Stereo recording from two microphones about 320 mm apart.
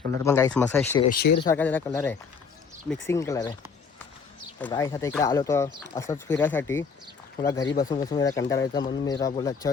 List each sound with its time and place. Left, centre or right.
0.2 s speech: centre
1.1 s speech: left
1.5 s speech: centre
4.6 s speech: centre